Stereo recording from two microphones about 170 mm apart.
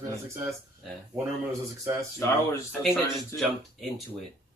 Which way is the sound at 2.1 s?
15° left (ahead or behind).